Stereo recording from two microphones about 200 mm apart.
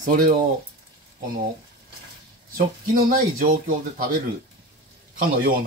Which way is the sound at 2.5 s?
45° right (ahead or behind).